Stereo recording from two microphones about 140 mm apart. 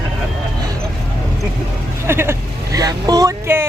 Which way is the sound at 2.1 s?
15° right (ahead or behind).